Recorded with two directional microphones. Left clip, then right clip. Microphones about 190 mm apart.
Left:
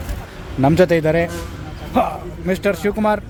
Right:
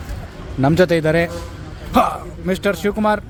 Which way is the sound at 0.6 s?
5° right (ahead or behind).